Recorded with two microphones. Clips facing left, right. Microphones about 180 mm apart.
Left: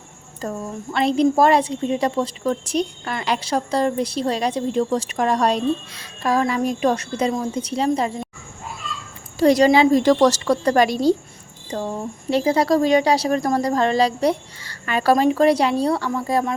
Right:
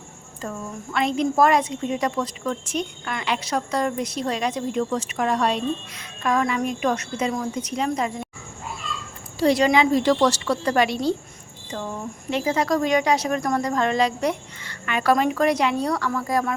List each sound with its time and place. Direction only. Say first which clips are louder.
0.4 s a woman's voice: left 4 dB; 35° left (ahead or behind)
9.4 s a woman's voice: left 4 dB; 40° left (ahead or behind); by 16.6 s 25° left (ahead or behind)